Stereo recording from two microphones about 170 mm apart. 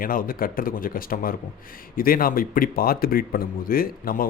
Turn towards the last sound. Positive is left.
turn(degrees=60)  # may be behind; listen again after turning